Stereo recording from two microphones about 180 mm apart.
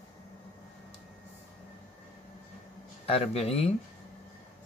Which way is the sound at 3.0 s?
35° left (ahead or behind).